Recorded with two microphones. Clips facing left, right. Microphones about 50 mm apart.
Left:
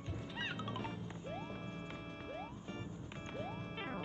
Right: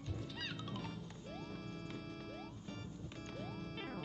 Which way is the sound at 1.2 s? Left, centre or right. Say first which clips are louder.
Left 3 dB; left.